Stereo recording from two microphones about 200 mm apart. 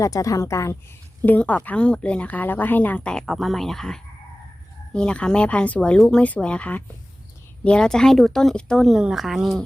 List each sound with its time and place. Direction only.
0.0 s a woman's voice: 15° left (ahead or behind); by 9.6 s centre (ahead or behind)